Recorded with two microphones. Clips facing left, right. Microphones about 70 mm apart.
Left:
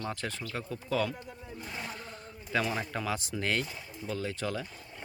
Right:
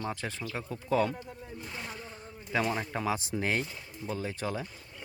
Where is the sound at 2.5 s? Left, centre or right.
Centre.